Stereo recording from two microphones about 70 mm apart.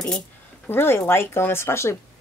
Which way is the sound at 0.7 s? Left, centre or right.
Left.